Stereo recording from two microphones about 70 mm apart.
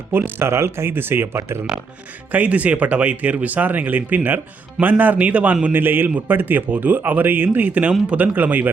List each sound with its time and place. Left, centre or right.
0.1 s speech: right
2.3 s a man's voice: right